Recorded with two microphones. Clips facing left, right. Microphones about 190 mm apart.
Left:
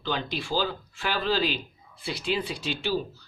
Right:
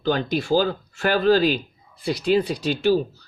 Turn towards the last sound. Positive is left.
turn(degrees=-45)  # may be behind; listen again after turning